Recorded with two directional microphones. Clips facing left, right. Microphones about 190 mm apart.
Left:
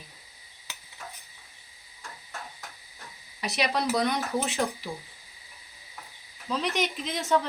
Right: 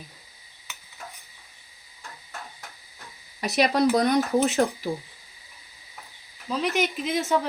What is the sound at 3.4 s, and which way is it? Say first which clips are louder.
Speech: right 7 dB; 45° right (ahead or behind).